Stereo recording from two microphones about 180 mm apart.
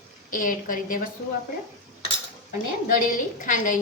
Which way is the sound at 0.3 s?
50° left (ahead or behind).